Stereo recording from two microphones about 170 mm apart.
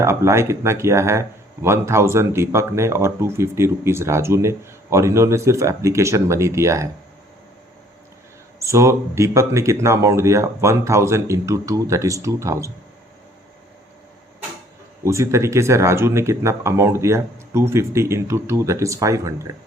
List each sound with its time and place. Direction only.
0.0 s speech: 15° right (ahead or behind)
8.5 s speech: 15° right (ahead or behind)
15.0 s speech: 15° right (ahead or behind)